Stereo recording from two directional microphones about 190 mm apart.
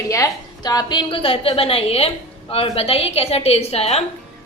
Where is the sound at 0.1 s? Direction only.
15° left (ahead or behind); by 4.0 s 35° left (ahead or behind).